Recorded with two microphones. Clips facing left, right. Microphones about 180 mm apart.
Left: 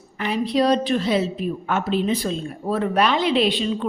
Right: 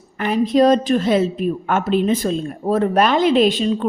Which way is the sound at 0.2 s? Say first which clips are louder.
Right 5 dB; 50° right (ahead or behind).